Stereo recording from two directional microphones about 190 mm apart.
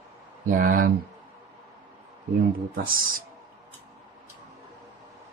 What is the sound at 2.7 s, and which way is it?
Speech, 50° right (ahead or behind).